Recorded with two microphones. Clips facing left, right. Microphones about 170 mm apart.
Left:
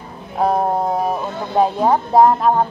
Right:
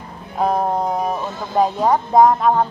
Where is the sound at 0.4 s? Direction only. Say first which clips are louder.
Left 1 dB; 5° left (ahead or behind).